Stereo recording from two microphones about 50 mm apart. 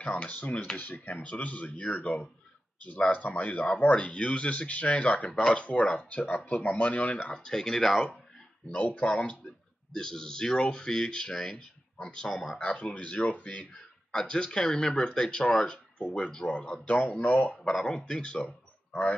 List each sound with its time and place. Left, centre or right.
0.0 s speech: left
7.3 s speech: centre
9.0 s speech: left
9.9 s speech: centre
12.3 s speech: centre
12.5 s speech: left
14.1 s speech: centre; by 17.7 s left
17.8 s speech: centre